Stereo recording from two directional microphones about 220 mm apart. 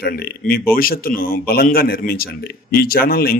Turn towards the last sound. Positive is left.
turn(degrees=45)  # may be behind; listen again after turning